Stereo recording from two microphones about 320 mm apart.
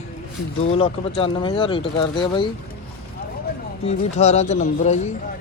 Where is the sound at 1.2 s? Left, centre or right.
Centre.